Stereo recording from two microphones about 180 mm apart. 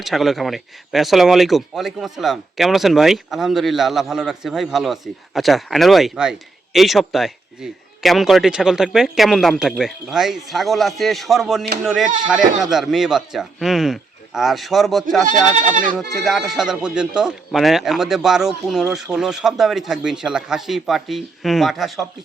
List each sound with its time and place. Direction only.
0.0 s speech: centre (ahead or behind)
15.3 s speech: 45° right (ahead or behind)
16.0 s speech: centre (ahead or behind)